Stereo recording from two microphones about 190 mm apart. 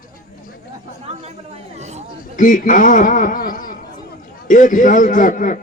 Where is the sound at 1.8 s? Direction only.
35° right (ahead or behind).